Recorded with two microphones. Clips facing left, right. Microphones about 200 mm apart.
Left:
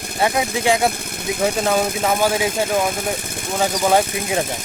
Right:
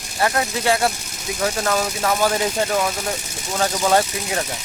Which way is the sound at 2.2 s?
10° left (ahead or behind).